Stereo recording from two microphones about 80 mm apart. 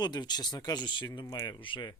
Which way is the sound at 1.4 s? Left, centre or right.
Left.